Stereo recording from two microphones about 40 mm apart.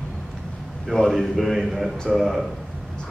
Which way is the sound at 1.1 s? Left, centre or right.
Centre.